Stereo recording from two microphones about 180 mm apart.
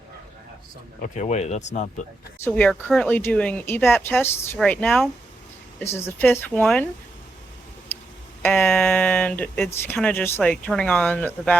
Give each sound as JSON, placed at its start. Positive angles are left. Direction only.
{"t": 1.0, "sound": "speech", "side_deg": 40}
{"t": 2.4, "sound": "speech", "side_deg": 10}
{"t": 8.4, "sound": "speech", "side_deg": 5}